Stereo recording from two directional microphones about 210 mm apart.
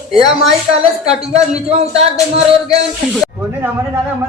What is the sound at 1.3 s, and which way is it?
Speech, 30° right (ahead or behind).